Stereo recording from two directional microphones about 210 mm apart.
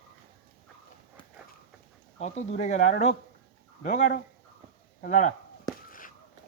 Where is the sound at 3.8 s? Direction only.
35° left (ahead or behind).